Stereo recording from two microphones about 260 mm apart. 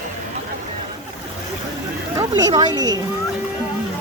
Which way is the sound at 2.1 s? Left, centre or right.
Centre.